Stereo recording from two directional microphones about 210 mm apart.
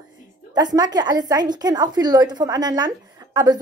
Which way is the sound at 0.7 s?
20° right (ahead or behind).